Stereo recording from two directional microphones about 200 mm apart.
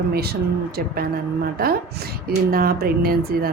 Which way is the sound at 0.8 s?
50° right (ahead or behind).